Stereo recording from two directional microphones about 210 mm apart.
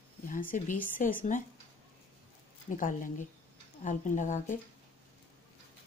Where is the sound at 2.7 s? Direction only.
40° left (ahead or behind).